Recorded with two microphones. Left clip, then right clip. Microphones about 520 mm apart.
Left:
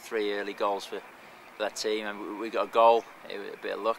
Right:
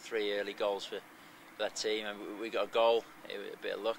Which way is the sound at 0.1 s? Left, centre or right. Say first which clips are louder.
Left 4 dB; right.